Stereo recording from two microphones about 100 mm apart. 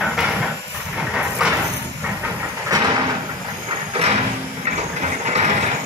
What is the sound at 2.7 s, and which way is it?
Train, 40° right (ahead or behind).